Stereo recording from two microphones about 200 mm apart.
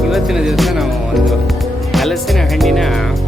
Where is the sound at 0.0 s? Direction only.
Centre (ahead or behind).